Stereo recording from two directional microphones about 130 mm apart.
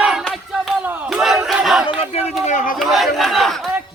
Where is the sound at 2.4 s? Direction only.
75° left (ahead or behind).